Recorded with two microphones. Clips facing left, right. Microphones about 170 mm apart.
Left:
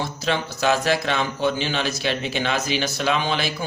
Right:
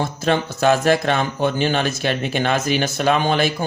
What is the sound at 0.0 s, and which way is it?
Speech, 50° right (ahead or behind).